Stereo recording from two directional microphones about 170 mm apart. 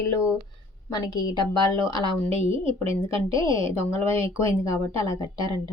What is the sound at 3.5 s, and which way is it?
Speech, 15° left (ahead or behind).